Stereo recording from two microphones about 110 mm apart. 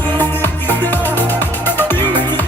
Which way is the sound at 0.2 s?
15° left (ahead or behind).